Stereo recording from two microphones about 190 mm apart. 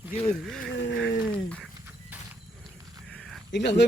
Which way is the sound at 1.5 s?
5° left (ahead or behind).